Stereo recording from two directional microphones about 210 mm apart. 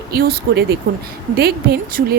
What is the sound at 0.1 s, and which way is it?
Speech, 50° right (ahead or behind).